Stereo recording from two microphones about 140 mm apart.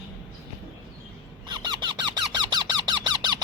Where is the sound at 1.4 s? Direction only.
30° right (ahead or behind).